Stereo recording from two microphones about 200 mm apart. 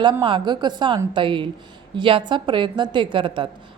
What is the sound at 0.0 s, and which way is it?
A woman's voice, 25° right (ahead or behind).